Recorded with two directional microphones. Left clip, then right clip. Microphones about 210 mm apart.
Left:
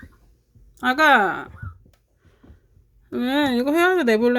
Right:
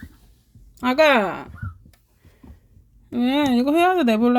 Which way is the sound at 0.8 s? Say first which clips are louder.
Left 1 dB; 10° left (ahead or behind).